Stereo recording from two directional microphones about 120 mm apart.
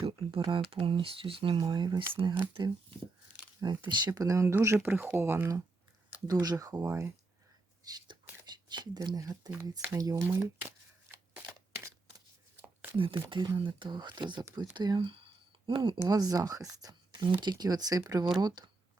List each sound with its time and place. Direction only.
0.0 s speech: 45° right (ahead or behind)
1.5 s speech: 40° right (ahead or behind); by 5.6 s 20° right (ahead or behind)
6.2 s speech: 35° right (ahead or behind)
7.9 s speech: 35° right (ahead or behind); by 10.7 s 20° right (ahead or behind)
13.7 s speech: 40° right (ahead or behind)